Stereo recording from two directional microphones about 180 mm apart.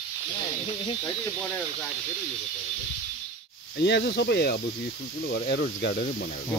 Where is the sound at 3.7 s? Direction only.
70° left (ahead or behind).